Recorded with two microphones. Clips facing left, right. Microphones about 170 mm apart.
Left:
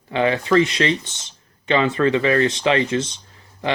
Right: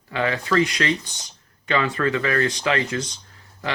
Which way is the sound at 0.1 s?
20° left (ahead or behind).